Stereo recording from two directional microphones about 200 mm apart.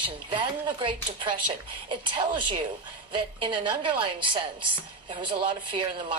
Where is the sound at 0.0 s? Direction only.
25° right (ahead or behind).